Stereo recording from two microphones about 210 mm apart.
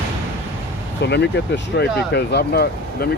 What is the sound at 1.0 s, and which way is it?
Speech, 55° left (ahead or behind).